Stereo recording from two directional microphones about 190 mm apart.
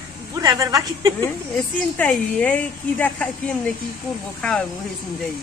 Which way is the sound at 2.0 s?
5° left (ahead or behind).